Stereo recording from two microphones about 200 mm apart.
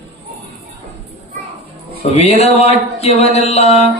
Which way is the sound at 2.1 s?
30° left (ahead or behind).